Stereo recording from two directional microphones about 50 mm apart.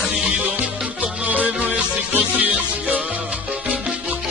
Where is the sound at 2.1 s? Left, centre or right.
Right.